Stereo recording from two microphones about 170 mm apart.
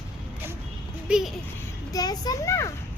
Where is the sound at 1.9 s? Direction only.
20° left (ahead or behind).